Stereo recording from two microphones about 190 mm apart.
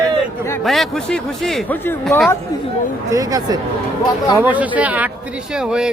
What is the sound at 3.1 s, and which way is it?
A man's voice, 20° right (ahead or behind).